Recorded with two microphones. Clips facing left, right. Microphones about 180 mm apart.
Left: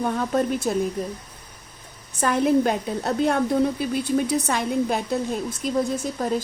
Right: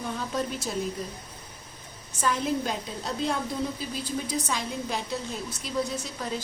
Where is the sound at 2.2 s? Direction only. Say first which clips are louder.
Left 8 dB; 55° left (ahead or behind).